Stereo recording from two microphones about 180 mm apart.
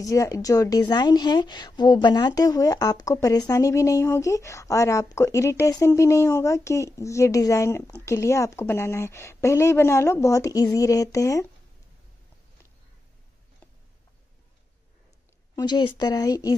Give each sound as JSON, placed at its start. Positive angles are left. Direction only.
{"t": 0.0, "sound": "a woman's voice", "side_deg": 20}
{"t": 15.5, "sound": "speech", "side_deg": 25}